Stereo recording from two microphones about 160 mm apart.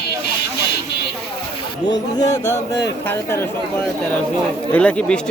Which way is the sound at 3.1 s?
15° left (ahead or behind).